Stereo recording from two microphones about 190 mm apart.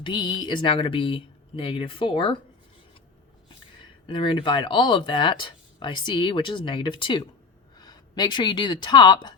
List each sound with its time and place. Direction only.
0.0 s speech: 25° left (ahead or behind)
4.1 s a woman's voice: 25° left (ahead or behind)